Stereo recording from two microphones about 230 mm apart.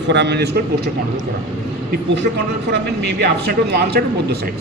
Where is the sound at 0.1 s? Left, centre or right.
Right.